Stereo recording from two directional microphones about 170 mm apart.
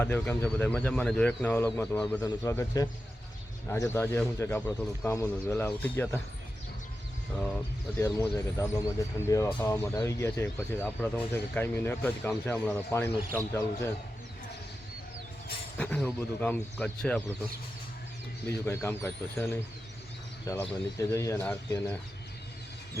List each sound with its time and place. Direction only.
0.0 s speech: 10° left (ahead or behind)
7.9 s speech: 15° left (ahead or behind)
15.8 s speech: 5° left (ahead or behind)
18.6 s speech: 15° left (ahead or behind)